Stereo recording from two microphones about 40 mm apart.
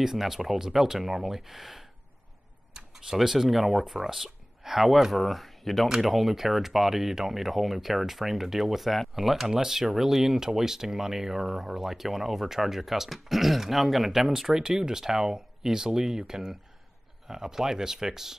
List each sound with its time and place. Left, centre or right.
0.0 s speech: centre
2.7 s tick-tock: centre
3.2 s speech: centre